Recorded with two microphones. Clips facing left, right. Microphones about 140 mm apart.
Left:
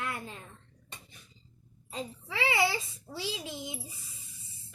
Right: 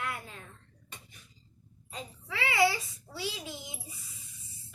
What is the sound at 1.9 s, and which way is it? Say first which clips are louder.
A child's voice: left 3 dB; 25° left (ahead or behind).